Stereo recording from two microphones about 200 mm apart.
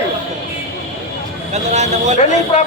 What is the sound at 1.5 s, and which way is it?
Speech, 35° right (ahead or behind).